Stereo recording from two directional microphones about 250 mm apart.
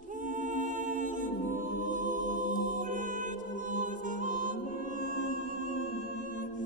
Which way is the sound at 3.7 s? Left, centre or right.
Right.